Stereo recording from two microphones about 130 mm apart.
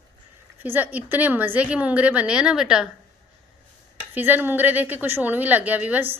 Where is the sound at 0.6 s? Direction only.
15° right (ahead or behind).